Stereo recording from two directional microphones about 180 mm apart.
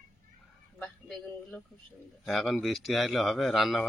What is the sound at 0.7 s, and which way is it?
Speech, 5° left (ahead or behind).